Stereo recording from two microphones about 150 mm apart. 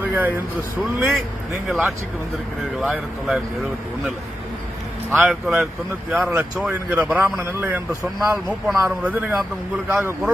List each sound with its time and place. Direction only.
0.0 s speech: 10° right (ahead or behind)
2.8 s speech: centre (ahead or behind)
5.1 s speech: 5° right (ahead or behind)
6.3 s speech: 15° right (ahead or behind)